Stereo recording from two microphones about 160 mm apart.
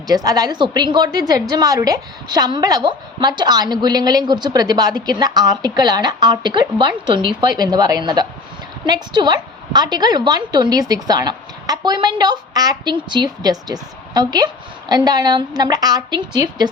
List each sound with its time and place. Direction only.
0.1 s a woman's voice: 25° right (ahead or behind)